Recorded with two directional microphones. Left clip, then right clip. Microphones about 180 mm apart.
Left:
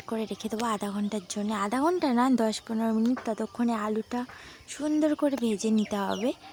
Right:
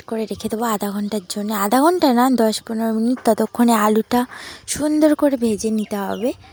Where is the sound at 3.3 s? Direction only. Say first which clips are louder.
Right 13 dB; 35° right (ahead or behind).